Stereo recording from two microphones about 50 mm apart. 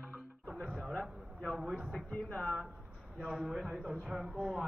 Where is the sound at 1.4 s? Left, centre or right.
Centre.